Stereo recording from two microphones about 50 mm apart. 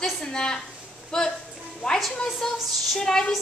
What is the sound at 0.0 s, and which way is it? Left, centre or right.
A woman's voice, centre.